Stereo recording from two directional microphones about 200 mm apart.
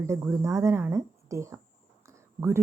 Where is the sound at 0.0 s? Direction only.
10° right (ahead or behind).